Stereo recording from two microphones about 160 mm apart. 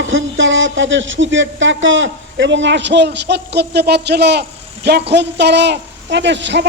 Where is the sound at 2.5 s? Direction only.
90° right.